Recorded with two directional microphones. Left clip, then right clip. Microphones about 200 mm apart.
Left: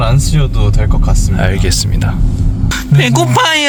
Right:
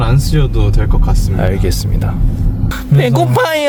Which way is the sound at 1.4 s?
10° right (ahead or behind).